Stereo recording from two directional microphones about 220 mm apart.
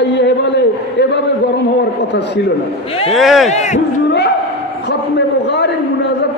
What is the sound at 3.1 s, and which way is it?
Speech, centre (ahead or behind).